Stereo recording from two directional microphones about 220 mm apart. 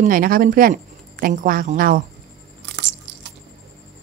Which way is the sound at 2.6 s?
55° right (ahead or behind).